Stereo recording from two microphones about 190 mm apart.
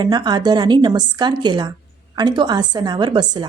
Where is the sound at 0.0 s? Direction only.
20° right (ahead or behind).